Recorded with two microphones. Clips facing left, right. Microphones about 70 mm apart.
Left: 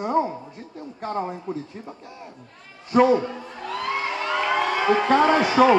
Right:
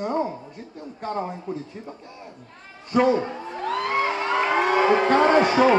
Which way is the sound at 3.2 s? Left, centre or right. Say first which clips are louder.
Right 3 dB; right.